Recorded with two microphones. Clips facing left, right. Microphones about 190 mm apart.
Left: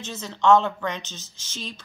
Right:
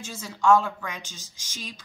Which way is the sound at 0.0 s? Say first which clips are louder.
Left 2 dB; 10° right (ahead or behind).